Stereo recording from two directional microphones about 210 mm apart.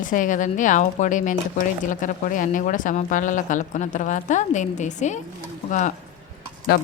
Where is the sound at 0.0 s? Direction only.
40° left (ahead or behind).